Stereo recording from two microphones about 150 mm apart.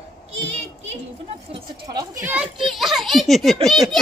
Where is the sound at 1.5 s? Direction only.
30° right (ahead or behind).